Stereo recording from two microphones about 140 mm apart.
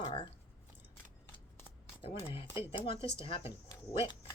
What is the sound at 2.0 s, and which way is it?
Speech, 40° left (ahead or behind).